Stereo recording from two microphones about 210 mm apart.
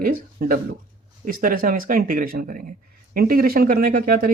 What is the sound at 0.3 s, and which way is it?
Speech, 40° right (ahead or behind).